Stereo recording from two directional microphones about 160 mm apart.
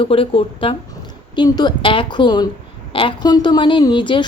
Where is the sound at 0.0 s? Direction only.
35° left (ahead or behind).